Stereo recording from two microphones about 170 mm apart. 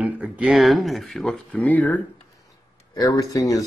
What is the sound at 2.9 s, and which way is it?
Speech, 20° left (ahead or behind).